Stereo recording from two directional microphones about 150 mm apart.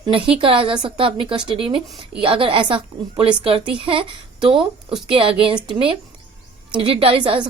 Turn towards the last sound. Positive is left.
turn(degrees=-35)  # may be behind; listen again after turning